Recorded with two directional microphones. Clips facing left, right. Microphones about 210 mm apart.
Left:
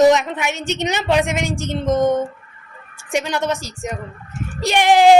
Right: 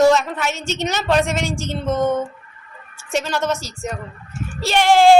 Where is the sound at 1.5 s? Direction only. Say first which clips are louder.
Left 1 dB; 55° left (ahead or behind).